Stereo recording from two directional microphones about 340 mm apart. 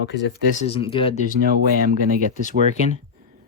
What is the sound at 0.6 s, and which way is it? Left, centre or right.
Speech, centre.